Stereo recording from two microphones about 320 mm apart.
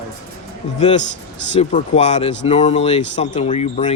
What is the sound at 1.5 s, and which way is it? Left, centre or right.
Speech, left.